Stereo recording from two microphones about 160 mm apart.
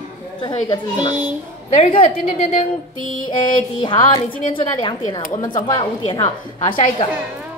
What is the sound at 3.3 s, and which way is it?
Child singing, 30° left (ahead or behind).